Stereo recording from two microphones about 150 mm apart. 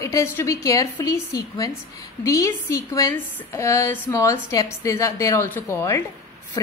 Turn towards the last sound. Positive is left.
turn(degrees=20)  # may be behind; listen again after turning